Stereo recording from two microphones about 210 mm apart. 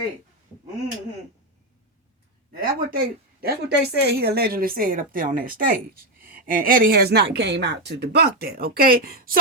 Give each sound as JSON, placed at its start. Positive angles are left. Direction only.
{"t": 2.5, "sound": "a woman's voice", "side_deg": -45}